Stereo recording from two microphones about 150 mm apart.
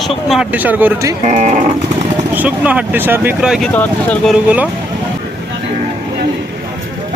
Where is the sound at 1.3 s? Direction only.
50° right (ahead or behind).